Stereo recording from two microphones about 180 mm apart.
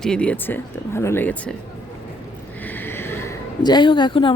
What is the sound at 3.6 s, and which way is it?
Speech, 25° left (ahead or behind).